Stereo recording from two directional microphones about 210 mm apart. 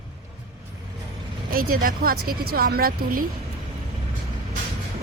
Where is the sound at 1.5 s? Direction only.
45° right (ahead or behind).